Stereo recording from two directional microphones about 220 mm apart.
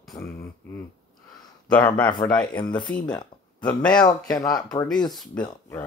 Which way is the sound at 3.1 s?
20° left (ahead or behind).